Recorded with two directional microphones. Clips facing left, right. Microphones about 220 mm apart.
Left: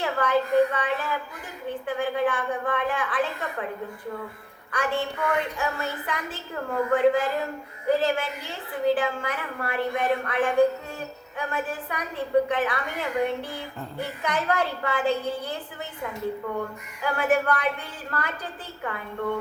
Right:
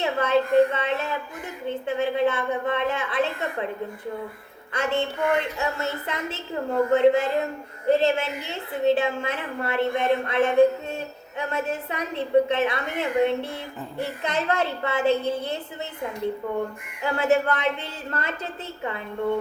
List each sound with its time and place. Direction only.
0.0 s a woman's voice: 25° right (ahead or behind)
4.7 s a woman's voice: 25° right (ahead or behind)